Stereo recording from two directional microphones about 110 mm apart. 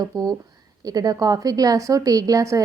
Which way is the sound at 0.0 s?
35° right (ahead or behind).